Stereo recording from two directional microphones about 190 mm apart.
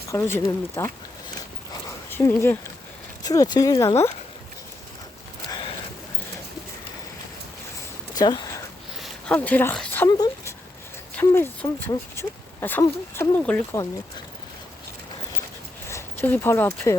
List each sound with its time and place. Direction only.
0.1 s speech: 15° left (ahead or behind)
2.0 s speech: 10° left (ahead or behind)
5.5 s a sound: 25° left (ahead or behind)
8.1 s a sound: 20° left (ahead or behind)
9.0 s speech: centre (ahead or behind)
15.9 s speech: 10° left (ahead or behind)